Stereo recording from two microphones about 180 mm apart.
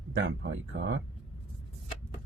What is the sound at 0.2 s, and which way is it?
Speech, 90° right.